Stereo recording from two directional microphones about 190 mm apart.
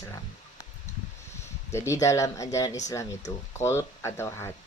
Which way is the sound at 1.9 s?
15° left (ahead or behind).